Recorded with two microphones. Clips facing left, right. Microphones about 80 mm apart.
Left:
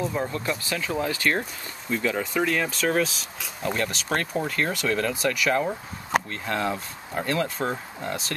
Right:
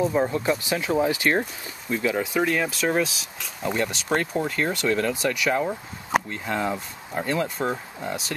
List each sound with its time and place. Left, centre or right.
0.1 s speech: right; by 8.4 s centre